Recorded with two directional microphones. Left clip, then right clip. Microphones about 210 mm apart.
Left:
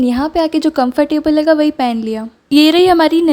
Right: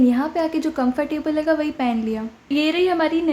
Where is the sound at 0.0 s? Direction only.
40° left (ahead or behind).